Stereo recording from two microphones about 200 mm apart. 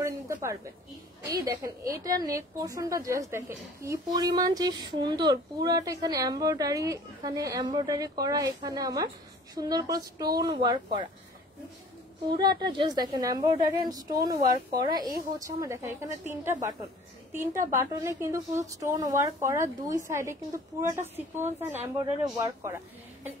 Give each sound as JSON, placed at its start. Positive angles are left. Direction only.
{"t": 0.0, "sound": "a sound", "side_deg": -15}
{"t": 1.2, "sound": "a woman's voice", "side_deg": -15}
{"t": 12.3, "sound": "a woman's voice", "side_deg": -20}
{"t": 14.4, "sound": "speech", "side_deg": -50}
{"t": 15.0, "sound": "a woman's voice", "side_deg": -15}